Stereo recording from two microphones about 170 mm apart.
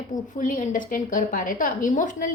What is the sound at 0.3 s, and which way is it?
A woman's voice, 50° left (ahead or behind).